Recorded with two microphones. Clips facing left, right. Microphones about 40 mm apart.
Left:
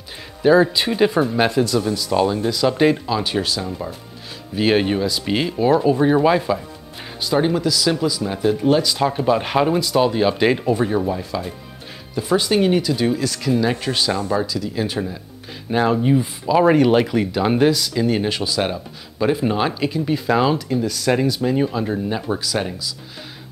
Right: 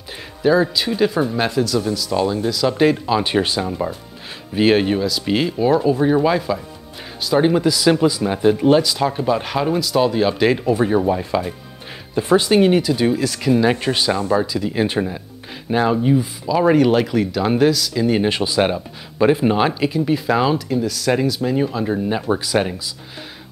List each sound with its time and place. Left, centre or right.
0.4 s speech: centre
2.4 s speech: centre
3.1 s speech: centre
4.6 s speech: centre
7.4 s speech: centre
8.8 s speech: centre
10.9 s speech: centre
13.4 s speech: centre
14.6 s speech: right
15.7 s speech: centre
18.2 s speech: centre